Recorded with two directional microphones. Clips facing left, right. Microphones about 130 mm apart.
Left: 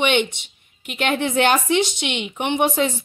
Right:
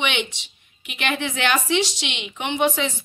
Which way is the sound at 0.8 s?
50° left (ahead or behind).